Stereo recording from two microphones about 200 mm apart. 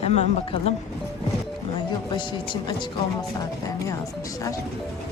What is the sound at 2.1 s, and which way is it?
Speech, 25° left (ahead or behind).